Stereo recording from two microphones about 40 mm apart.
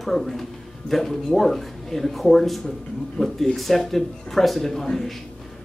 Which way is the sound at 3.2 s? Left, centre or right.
Left.